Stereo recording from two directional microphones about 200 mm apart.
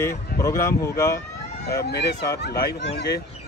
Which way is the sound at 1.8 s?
55° left (ahead or behind).